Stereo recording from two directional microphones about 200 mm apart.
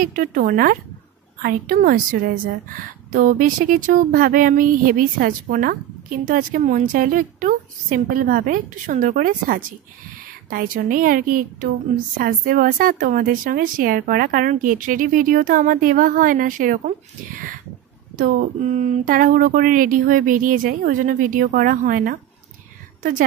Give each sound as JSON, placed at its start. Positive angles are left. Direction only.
{"t": 0.0, "sound": "speech", "side_deg": -45}
{"t": 18.1, "sound": "speech", "side_deg": -40}